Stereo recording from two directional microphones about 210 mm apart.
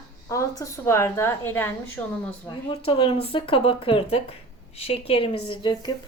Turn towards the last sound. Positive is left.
turn(degrees=20)  # may be behind; listen again after turning